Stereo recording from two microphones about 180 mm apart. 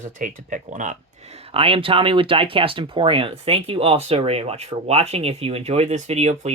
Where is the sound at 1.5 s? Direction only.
30° right (ahead or behind).